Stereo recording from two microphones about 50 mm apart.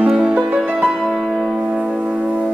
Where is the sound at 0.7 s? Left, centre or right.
Centre.